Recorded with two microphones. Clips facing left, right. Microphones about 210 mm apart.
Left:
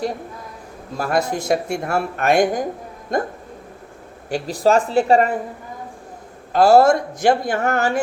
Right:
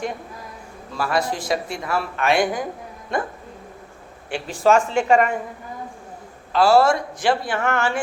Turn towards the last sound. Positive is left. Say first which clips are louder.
# left 3 dB
turn(degrees=40)  # may be behind; listen again after turning